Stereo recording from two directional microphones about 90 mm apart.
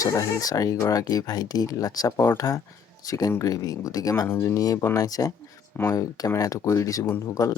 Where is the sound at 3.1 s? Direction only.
45° left (ahead or behind).